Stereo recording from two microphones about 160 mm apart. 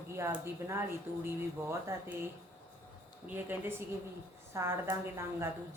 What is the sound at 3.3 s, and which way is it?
A woman's voice, 15° right (ahead or behind).